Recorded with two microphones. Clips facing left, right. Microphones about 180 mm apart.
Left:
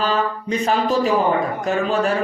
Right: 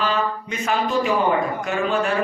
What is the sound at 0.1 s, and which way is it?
Speech, 35° left (ahead or behind).